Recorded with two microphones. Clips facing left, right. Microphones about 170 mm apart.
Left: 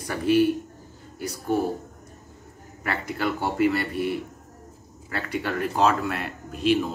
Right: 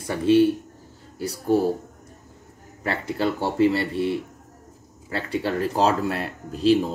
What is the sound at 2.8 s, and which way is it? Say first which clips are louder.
Speech: right 3 dB; 30° right (ahead or behind).